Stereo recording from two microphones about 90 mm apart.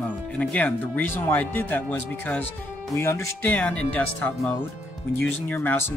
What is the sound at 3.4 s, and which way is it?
Speech, 15° left (ahead or behind).